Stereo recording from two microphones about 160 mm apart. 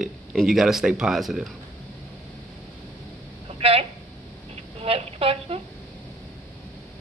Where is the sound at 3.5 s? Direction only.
35° right (ahead or behind).